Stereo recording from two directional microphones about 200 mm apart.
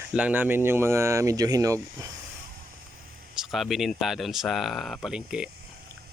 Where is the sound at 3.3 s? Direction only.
Centre (ahead or behind).